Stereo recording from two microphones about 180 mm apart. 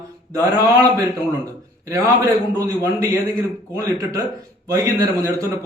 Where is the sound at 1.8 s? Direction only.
15° right (ahead or behind).